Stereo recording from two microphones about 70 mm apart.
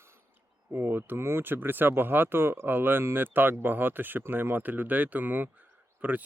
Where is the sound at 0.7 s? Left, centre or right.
Right.